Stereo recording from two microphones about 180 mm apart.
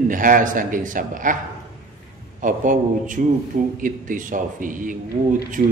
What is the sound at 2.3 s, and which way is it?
A man's voice, 45° right (ahead or behind).